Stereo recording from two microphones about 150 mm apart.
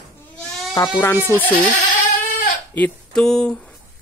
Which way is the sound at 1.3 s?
10° left (ahead or behind).